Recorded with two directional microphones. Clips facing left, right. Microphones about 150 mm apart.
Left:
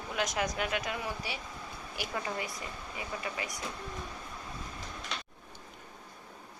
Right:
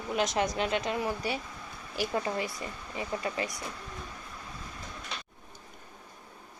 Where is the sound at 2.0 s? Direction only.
35° right (ahead or behind).